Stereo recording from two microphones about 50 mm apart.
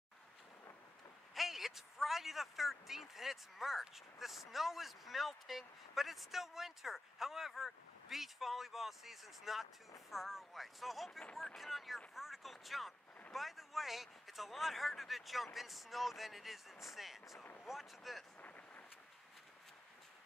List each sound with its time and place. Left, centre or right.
1.3 s speech: centre
12.2 s a sound: centre
13.3 s speech: centre